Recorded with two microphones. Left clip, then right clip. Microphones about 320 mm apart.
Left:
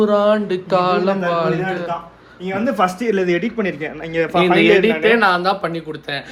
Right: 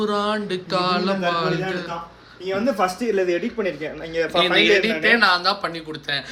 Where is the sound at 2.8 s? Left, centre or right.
Left.